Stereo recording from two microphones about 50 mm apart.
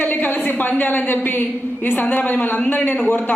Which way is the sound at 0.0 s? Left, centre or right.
Left.